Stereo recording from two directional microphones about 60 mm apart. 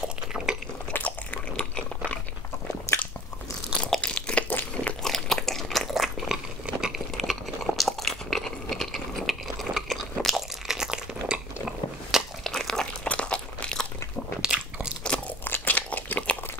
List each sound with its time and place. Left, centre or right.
0.9 s biting: left
3.7 s crunch: centre
4.5 s crunch: left
5.0 s biting: centre
6.2 s a sound: centre
7.2 s a sound: centre
10.8 s crunch: centre
12.4 s crunch: centre
13.0 s crunch: centre
14.4 s crunch: centre
15.4 s crumpling: left